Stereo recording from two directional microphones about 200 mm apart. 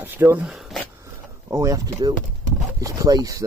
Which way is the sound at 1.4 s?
15° right (ahead or behind).